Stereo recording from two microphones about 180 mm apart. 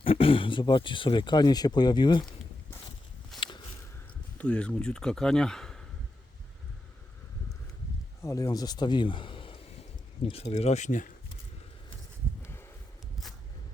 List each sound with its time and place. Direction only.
0.0 s speech: 30° left (ahead or behind)
3.3 s walk: centre (ahead or behind)
4.4 s speech: 5° left (ahead or behind)
8.2 s a man's voice: 15° left (ahead or behind); by 11.1 s 45° left (ahead or behind)
12.4 s a sound: 15° left (ahead or behind)